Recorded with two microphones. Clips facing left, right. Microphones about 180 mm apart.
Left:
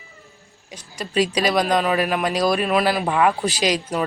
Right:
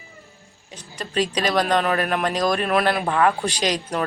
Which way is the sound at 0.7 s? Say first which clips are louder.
Left 2 dB; 10° left (ahead or behind).